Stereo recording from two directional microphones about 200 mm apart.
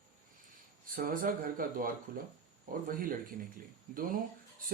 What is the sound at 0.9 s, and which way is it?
Speech, 45° right (ahead or behind).